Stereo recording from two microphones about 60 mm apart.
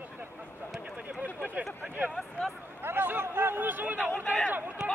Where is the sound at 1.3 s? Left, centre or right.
Left.